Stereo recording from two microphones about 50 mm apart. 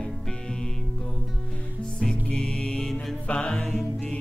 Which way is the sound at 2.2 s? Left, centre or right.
Centre.